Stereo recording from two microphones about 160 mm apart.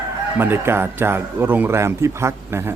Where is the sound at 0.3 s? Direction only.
15° right (ahead or behind).